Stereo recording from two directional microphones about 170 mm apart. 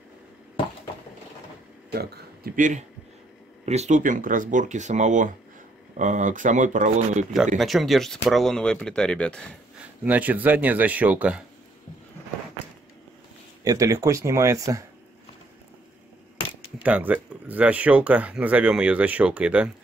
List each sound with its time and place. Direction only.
1.9 s speech: 65° right (ahead or behind); by 7.2 s 50° right (ahead or behind)
7.5 s speech: centre (ahead or behind)
9.8 s speech: 10° right (ahead or behind)
13.7 s speech: 20° right (ahead or behind)
16.8 s speech: 10° right (ahead or behind)